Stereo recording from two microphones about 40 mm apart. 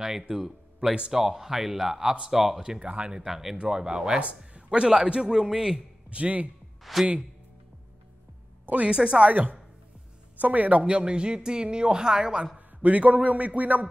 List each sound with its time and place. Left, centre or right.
0.0 s speech: centre
2.8 s a man's voice: right
3.3 s speech: centre
6.0 s a man's voice: right
6.8 s speech: centre
8.9 s speech: centre
9.3 s speech: right
10.9 s speech: right
12.5 s a man's voice: right